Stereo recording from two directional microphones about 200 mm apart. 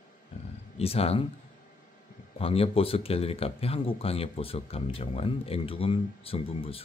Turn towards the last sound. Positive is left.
turn(degrees=30)  # may be behind; listen again after turning